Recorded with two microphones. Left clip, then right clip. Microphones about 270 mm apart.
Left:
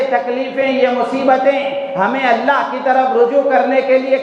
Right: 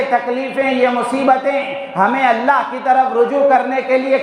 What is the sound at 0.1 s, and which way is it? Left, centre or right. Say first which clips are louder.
Speech: even; right.